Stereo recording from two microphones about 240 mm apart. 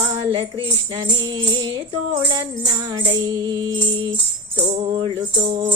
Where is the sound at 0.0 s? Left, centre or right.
Centre.